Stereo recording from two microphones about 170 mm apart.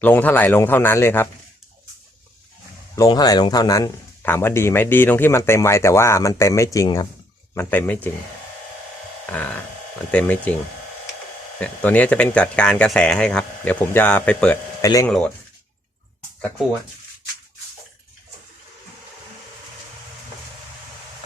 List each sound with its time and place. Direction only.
0.0 s speech: 10° left (ahead or behind)
2.9 s speech: 20° left (ahead or behind)
7.5 s speech: 10° left (ahead or behind)
9.2 s speech: 10° left (ahead or behind)
11.6 s speech: 10° left (ahead or behind)
15.0 s speech: 5° left (ahead or behind)